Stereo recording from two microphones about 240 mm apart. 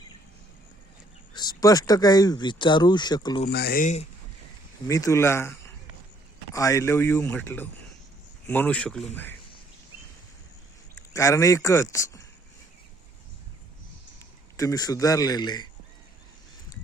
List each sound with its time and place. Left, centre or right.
1.3 s speech: centre
3.5 s speech: left
4.9 s a man's voice: centre
11.1 s speech: centre
14.5 s speech: centre